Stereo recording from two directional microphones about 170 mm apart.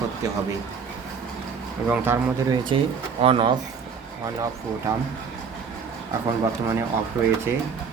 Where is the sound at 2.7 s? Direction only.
30° right (ahead or behind).